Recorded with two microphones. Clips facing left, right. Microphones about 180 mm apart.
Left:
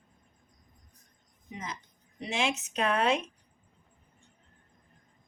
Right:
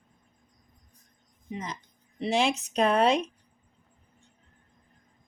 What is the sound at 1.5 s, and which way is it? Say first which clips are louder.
A woman's voice: right 4 dB; 30° right (ahead or behind).